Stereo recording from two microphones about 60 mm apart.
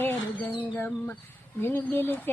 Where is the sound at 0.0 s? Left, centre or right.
Left.